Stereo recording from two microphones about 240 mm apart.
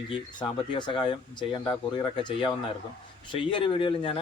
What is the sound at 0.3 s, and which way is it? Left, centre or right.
Speech, centre.